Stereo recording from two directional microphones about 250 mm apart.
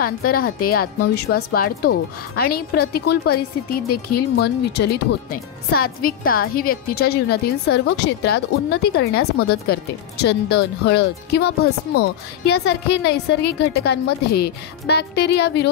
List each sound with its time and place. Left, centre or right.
0.0 s speech: left